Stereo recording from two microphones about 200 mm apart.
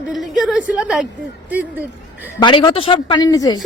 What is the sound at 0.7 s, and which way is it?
A woman's voice, 5° right (ahead or behind).